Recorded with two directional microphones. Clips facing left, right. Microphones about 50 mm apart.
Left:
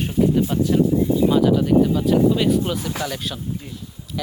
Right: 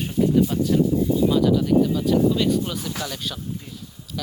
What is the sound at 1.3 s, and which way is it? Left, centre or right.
Speech, left.